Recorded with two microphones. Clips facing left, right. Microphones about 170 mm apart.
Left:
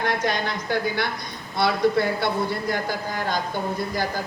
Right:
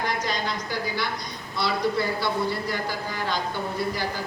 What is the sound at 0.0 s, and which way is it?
A woman's voice, 60° left (ahead or behind).